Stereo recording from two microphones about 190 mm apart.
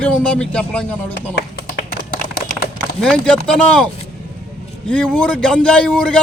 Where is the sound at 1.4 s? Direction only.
55° left (ahead or behind).